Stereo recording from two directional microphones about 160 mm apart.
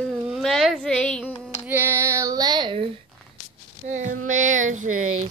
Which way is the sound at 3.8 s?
50° right (ahead or behind).